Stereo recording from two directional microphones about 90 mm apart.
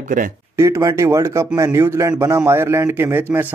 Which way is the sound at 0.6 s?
35° right (ahead or behind).